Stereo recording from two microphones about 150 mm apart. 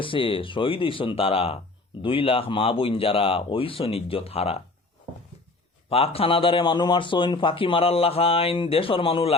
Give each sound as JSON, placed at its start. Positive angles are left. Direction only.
{"t": 0.0, "sound": "speech", "side_deg": 35}
{"t": 5.9, "sound": "speech", "side_deg": 40}